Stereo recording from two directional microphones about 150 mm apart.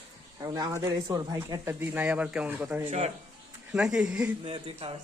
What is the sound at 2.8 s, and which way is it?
Speech, 45° right (ahead or behind).